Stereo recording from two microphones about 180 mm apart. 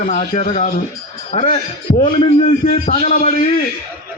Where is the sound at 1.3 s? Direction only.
30° left (ahead or behind).